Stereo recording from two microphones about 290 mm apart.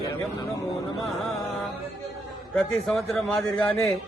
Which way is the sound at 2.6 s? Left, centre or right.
Centre.